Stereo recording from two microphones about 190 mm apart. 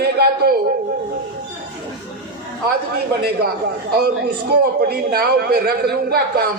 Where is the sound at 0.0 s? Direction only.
55° right (ahead or behind).